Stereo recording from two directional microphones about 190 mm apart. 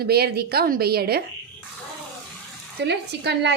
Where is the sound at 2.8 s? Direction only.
65° right (ahead or behind).